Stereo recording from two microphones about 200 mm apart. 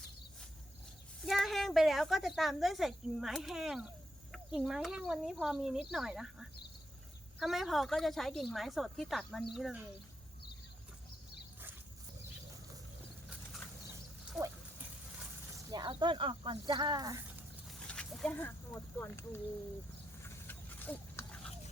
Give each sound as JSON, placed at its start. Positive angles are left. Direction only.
{"t": 1.2, "sound": "a woman's voice", "side_deg": 0}
{"t": 14.3, "sound": "dog", "side_deg": -10}
{"t": 15.7, "sound": "speech", "side_deg": -20}
{"t": 17.7, "sound": "speech", "side_deg": 5}
{"t": 20.2, "sound": "a sound", "side_deg": 10}